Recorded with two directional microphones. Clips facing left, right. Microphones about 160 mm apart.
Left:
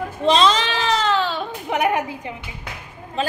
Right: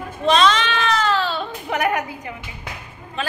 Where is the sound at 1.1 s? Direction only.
15° left (ahead or behind).